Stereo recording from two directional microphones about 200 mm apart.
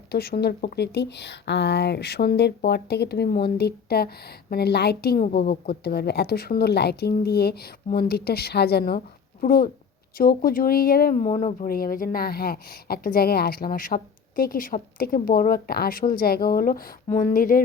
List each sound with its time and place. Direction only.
0.1 s speech: 50° left (ahead or behind)